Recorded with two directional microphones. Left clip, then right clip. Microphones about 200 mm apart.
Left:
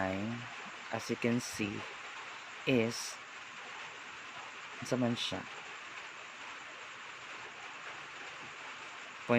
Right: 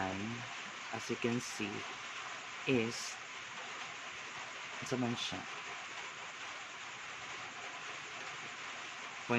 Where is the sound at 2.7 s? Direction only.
30° left (ahead or behind).